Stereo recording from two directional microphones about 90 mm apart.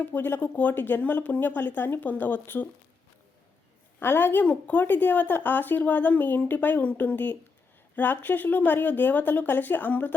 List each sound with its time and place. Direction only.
0.0 s speech: 25° left (ahead or behind)
4.0 s speech: 25° left (ahead or behind)